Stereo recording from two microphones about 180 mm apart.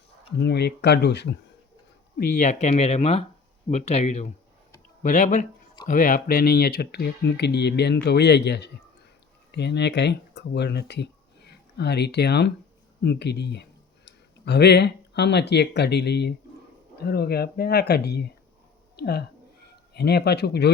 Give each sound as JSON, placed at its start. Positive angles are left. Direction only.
{"t": 0.3, "sound": "speech", "side_deg": 65}
{"t": 2.1, "sound": "speech", "side_deg": 50}